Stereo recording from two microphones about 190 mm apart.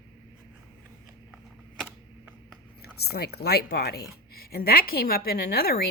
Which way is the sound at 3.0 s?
55° left (ahead or behind).